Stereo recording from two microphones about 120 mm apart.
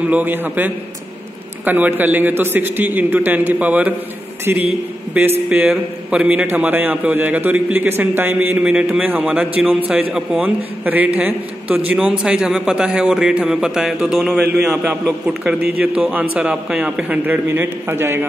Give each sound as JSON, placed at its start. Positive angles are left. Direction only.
{"t": 0.0, "sound": "a man's voice", "side_deg": -15}